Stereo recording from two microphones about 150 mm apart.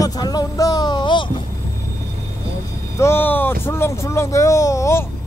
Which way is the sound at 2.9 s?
15° left (ahead or behind).